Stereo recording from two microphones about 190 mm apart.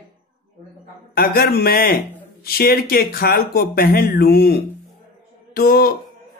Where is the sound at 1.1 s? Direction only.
50° left (ahead or behind).